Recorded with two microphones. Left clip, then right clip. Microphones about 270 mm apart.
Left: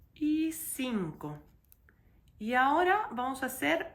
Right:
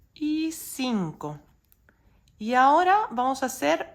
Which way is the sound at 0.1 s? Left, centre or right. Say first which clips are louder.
Right 3 dB; centre.